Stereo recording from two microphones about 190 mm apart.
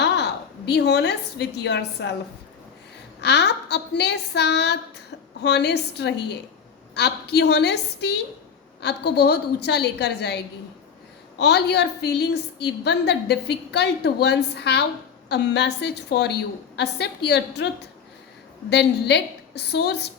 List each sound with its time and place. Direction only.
0.0 s a woman's voice: 60° left (ahead or behind)
3.2 s a woman's voice: 60° left (ahead or behind)